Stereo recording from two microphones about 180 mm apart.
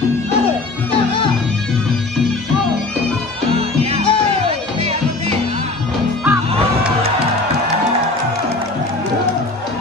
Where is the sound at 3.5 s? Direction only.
35° right (ahead or behind).